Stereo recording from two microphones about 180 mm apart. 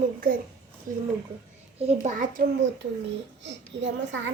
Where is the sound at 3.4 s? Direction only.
80° right.